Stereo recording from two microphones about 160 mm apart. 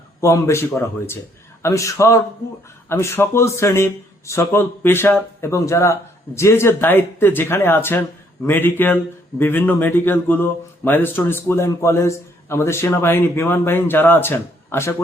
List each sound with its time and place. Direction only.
0.2 s a man's voice: 20° left (ahead or behind)